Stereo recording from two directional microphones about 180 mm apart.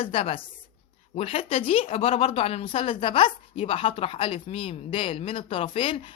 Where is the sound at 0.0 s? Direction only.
30° left (ahead or behind).